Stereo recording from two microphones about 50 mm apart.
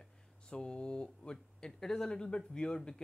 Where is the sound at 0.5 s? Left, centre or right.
Centre.